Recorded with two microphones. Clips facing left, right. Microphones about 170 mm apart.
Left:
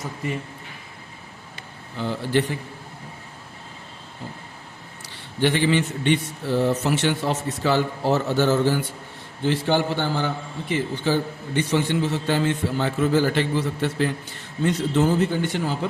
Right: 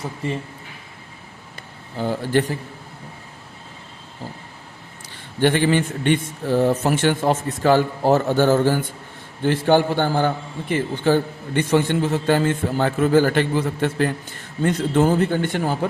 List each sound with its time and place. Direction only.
0.2 s speech: 30° right (ahead or behind)
2.0 s a man's voice: 45° right (ahead or behind)
5.0 s a man's voice: 50° right (ahead or behind)